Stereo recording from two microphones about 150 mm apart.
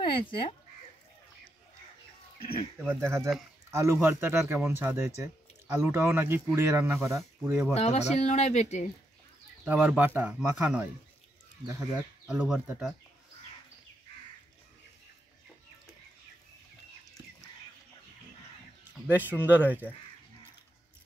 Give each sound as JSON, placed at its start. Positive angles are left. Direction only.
{"t": 0.0, "sound": "speech", "side_deg": 35}
{"t": 2.9, "sound": "speech", "side_deg": -20}
{"t": 7.7, "sound": "speech", "side_deg": 50}
{"t": 9.7, "sound": "speech", "side_deg": -10}
{"t": 12.3, "sound": "speech", "side_deg": -5}
{"t": 19.0, "sound": "speech", "side_deg": -10}